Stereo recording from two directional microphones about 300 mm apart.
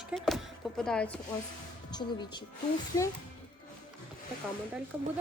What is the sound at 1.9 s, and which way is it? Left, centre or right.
Speech, centre.